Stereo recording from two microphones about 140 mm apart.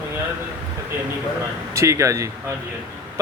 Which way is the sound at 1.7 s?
20° right (ahead or behind).